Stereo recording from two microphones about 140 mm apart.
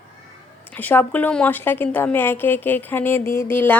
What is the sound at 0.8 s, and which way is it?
Speech, 10° left (ahead or behind).